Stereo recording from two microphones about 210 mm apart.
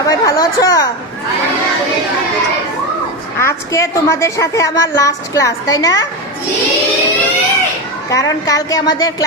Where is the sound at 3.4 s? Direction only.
15° left (ahead or behind).